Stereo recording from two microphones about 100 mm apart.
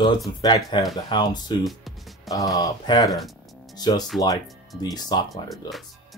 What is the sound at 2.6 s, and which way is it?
Speech, 45° left (ahead or behind).